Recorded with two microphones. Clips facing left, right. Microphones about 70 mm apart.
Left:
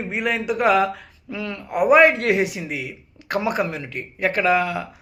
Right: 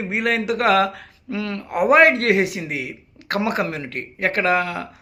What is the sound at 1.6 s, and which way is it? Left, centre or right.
Speech, centre.